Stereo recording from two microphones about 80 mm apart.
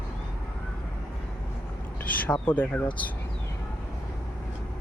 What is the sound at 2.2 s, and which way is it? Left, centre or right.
Speech, left.